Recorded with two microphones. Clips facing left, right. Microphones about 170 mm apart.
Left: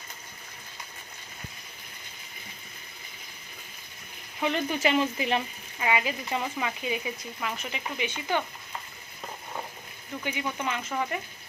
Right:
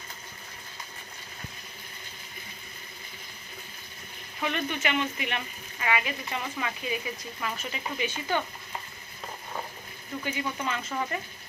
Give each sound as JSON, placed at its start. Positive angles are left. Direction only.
{"t": 4.4, "sound": "speech", "side_deg": 30}
{"t": 10.2, "sound": "speech", "side_deg": 15}